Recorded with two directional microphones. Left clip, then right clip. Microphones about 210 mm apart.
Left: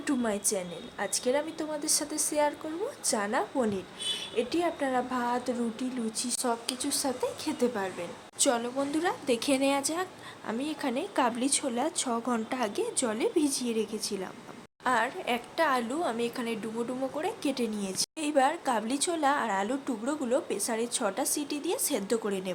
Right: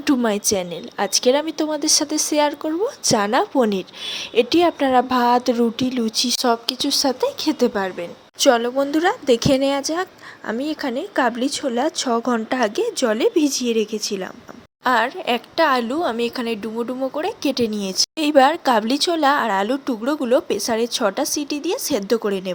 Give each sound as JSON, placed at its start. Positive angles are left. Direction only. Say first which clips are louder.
{"t": 0.0, "sound": "a woman's voice", "louder": "right 11 dB", "side_deg": -35}